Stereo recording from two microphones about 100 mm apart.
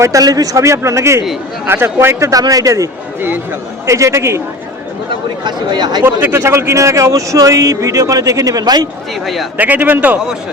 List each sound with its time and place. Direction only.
0.0 s speech: 35° right (ahead or behind)
3.2 s speech: 20° right (ahead or behind)
3.8 s a man's voice: 30° right (ahead or behind)
5.4 s speech: 45° right (ahead or behind)
6.1 s speech: 20° right (ahead or behind); by 8.9 s 40° right (ahead or behind)
9.2 s speech: centre (ahead or behind)
9.6 s speech: 15° right (ahead or behind)